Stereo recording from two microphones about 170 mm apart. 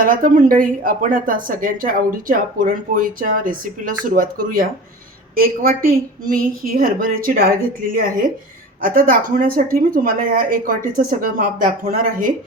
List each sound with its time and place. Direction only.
0.0 s a woman's voice: 55° right (ahead or behind)